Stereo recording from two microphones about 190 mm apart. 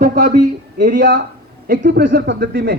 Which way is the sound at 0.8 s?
60° right (ahead or behind).